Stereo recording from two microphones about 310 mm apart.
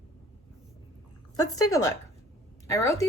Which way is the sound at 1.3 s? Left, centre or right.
Left.